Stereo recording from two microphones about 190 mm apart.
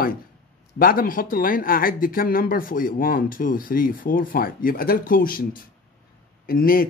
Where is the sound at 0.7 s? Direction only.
50° left (ahead or behind).